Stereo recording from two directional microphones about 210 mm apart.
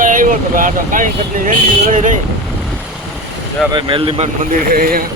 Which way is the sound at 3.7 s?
25° right (ahead or behind).